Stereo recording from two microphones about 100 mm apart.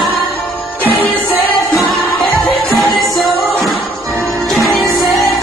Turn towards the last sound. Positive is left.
turn(degrees=0)  # may be behind; listen again after turning